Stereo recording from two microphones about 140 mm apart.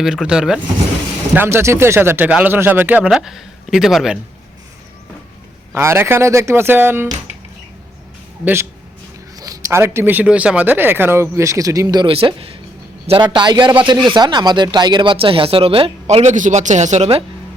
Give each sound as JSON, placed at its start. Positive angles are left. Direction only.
{"t": 0.0, "sound": "speech", "side_deg": -5}
{"t": 5.7, "sound": "speech", "side_deg": -15}
{"t": 9.3, "sound": "speech", "side_deg": -25}
{"t": 12.1, "sound": "a man's voice", "side_deg": -40}